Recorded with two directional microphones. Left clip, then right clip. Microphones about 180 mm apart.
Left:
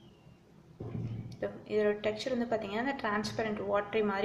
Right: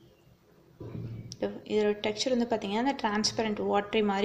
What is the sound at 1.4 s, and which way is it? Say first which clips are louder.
A woman's voice: right 2 dB; 40° right (ahead or behind).